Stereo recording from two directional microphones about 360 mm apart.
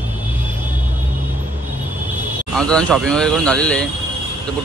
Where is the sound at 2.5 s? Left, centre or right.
Centre.